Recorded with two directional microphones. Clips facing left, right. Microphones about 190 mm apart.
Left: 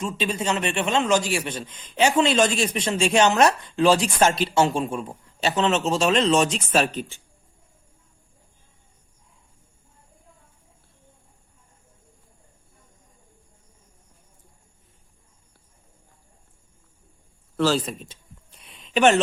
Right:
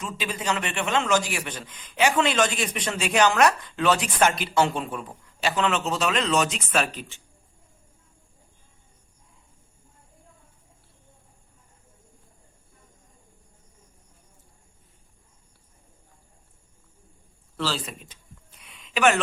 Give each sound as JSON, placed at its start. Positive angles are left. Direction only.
{"t": 0.0, "sound": "a man's voice", "side_deg": 25}
{"t": 17.9, "sound": "speech", "side_deg": 35}
{"t": 18.6, "sound": "a sound", "side_deg": 30}